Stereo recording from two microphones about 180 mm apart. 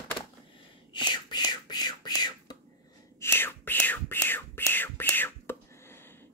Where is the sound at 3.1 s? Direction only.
15° left (ahead or behind).